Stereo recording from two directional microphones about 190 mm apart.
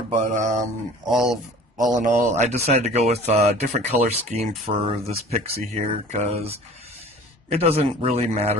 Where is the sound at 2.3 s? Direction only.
35° right (ahead or behind).